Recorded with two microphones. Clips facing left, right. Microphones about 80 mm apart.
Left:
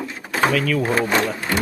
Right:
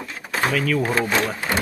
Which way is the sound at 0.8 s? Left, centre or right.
Centre.